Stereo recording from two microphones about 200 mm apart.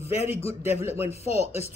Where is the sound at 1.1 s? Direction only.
30° left (ahead or behind).